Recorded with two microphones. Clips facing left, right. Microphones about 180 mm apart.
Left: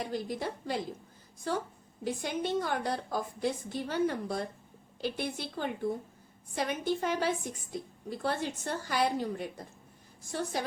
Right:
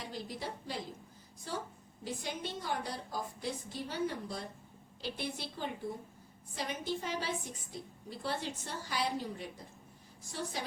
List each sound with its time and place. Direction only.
0.1 s a woman's voice: 50° left (ahead or behind)